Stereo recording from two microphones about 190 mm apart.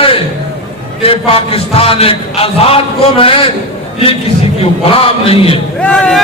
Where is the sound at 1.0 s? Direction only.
30° left (ahead or behind).